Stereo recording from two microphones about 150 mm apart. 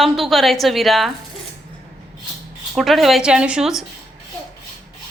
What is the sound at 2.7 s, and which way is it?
A woman's voice, centre (ahead or behind).